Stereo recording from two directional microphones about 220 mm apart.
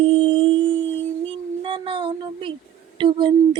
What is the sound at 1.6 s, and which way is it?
Child singing, 25° right (ahead or behind).